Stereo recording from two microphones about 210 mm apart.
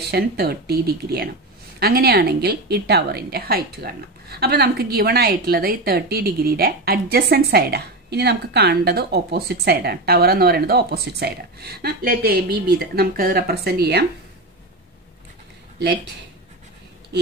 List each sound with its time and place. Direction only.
0.1 s a woman's voice: 45° right (ahead or behind)